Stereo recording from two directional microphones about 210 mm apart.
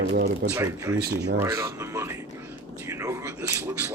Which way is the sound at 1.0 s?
50° right (ahead or behind).